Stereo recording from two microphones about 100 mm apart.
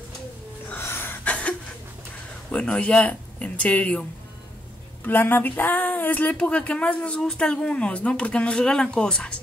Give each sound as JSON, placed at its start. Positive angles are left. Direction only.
{"t": 0.7, "sound": "gasp", "side_deg": 25}
{"t": 2.5, "sound": "speech", "side_deg": 10}
{"t": 5.0, "sound": "speech", "side_deg": 20}